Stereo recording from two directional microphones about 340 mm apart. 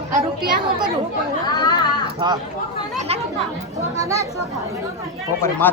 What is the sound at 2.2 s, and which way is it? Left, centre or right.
Speech, centre.